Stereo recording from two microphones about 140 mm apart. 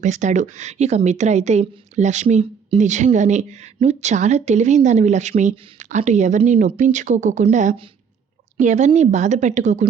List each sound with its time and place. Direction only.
0.0 s speech: 60° right (ahead or behind)
2.2 s speech: 45° right (ahead or behind)